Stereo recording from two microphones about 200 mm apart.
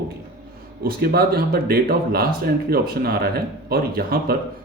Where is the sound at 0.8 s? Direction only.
50° right (ahead or behind).